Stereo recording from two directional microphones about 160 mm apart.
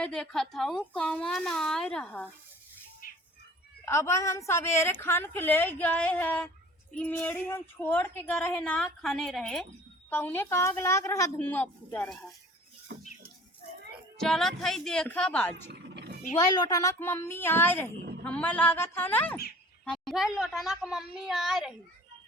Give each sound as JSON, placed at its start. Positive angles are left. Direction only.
{"t": 0.0, "sound": "a woman's voice", "side_deg": 5}
{"t": 3.8, "sound": "speech", "side_deg": 15}
{"t": 10.1, "sound": "speech", "side_deg": 10}
{"t": 12.9, "sound": "rodents", "side_deg": -90}
{"t": 14.2, "sound": "a woman's voice", "side_deg": 5}
{"t": 15.7, "sound": "roaring cats", "side_deg": -90}
{"t": 16.4, "sound": "a woman's voice", "side_deg": 25}